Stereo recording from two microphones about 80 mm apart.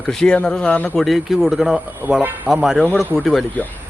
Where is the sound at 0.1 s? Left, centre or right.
Centre.